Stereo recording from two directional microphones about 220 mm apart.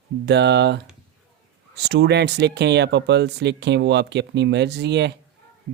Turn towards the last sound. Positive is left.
turn(degrees=-50)  # may be behind; listen again after turning